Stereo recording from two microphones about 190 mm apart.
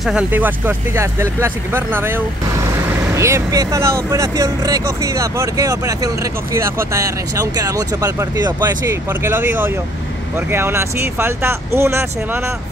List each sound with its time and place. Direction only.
0.0 s speech: 5° right (ahead or behind)